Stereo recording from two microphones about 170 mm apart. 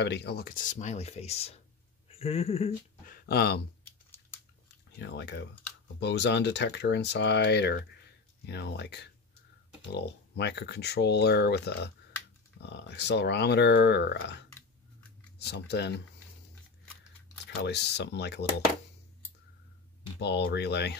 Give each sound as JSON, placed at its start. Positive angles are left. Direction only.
{"t": 0.0, "sound": "speech", "side_deg": 85}
{"t": 3.1, "sound": "a sound", "side_deg": 70}
{"t": 4.9, "sound": "speech", "side_deg": 90}
{"t": 12.6, "sound": "speech", "side_deg": 90}
{"t": 17.6, "sound": "speech", "side_deg": 85}
{"t": 20.2, "sound": "speech", "side_deg": 90}